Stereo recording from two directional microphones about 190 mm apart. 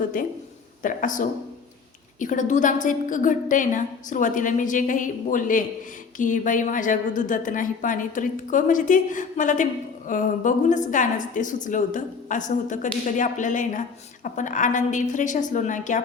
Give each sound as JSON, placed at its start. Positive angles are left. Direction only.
{"t": 0.1, "sound": "a woman's voice", "side_deg": 45}